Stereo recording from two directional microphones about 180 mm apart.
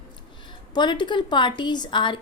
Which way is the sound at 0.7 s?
25° left (ahead or behind).